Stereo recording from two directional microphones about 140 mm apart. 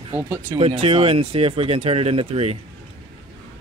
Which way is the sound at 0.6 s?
45° right (ahead or behind).